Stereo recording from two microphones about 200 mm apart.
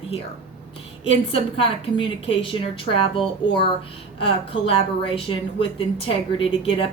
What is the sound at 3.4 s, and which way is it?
Speech, 25° left (ahead or behind).